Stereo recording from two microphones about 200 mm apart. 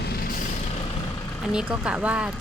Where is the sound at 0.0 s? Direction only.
50° left (ahead or behind).